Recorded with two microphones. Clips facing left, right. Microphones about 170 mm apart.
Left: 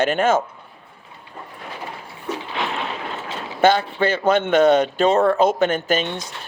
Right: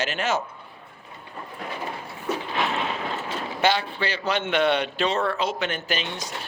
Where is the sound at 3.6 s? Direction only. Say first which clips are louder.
Left 7 dB; 50° left (ahead or behind).